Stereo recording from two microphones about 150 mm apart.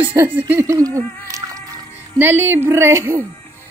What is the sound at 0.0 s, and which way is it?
Speech, 10° right (ahead or behind).